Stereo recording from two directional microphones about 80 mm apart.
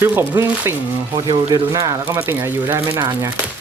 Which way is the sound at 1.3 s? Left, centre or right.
Right.